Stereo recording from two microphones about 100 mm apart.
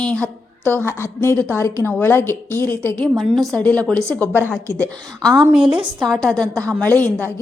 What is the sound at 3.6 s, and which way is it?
A woman's voice, 10° left (ahead or behind).